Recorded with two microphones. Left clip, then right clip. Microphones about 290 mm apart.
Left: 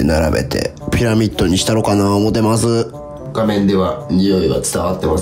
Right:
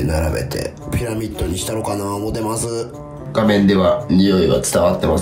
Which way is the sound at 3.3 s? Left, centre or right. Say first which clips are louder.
Even; centre.